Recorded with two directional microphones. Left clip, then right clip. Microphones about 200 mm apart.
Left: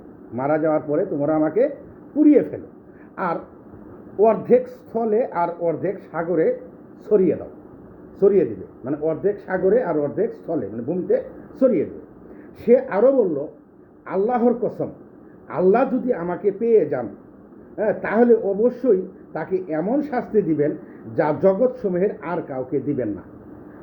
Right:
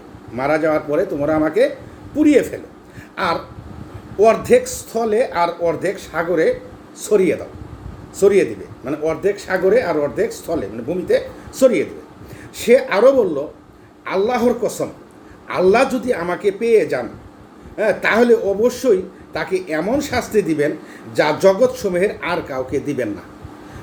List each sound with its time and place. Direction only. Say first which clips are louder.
0.3 s speech: right 3 dB; 20° right (ahead or behind)
4.2 s speech: right 4 dB; 20° right (ahead or behind)